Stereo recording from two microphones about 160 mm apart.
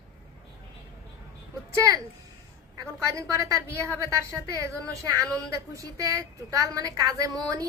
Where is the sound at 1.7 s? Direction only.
20° right (ahead or behind).